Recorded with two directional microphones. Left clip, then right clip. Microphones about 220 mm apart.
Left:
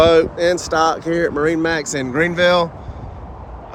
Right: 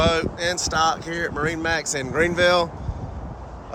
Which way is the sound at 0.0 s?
5° right (ahead or behind).